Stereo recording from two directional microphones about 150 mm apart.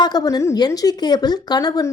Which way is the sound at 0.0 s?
25° left (ahead or behind).